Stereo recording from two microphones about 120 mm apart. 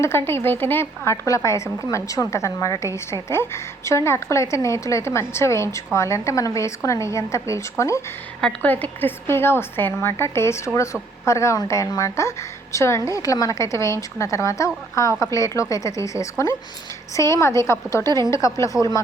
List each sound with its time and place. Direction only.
0.0 s a woman's voice: 20° left (ahead or behind)
8.4 s a woman's voice: 10° left (ahead or behind)
18.0 s a woman's voice: 35° right (ahead or behind)
18.3 s a woman's voice: 25° left (ahead or behind)